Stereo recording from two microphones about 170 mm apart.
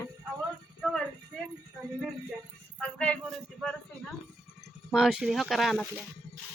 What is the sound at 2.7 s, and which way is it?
A woman's voice, 5° left (ahead or behind).